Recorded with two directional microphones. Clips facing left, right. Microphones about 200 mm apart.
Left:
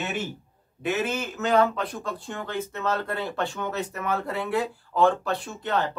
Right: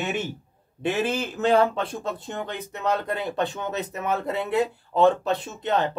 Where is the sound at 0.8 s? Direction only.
30° right (ahead or behind).